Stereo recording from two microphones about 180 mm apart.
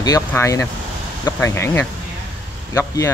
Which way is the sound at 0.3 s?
15° left (ahead or behind).